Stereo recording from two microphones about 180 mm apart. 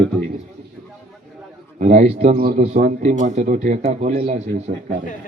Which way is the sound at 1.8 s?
40° right (ahead or behind).